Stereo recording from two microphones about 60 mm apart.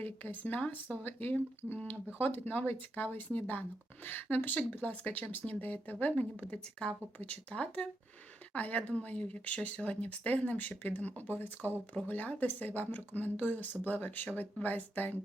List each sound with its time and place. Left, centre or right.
0.0 s speech: left
6.4 s speech: centre